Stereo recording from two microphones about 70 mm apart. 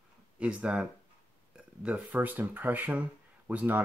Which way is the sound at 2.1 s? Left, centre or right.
Right.